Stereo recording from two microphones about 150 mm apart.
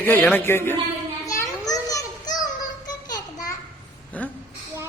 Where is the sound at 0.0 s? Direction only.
10° left (ahead or behind).